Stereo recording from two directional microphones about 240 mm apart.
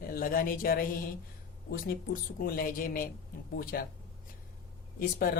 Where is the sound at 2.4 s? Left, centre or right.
Left.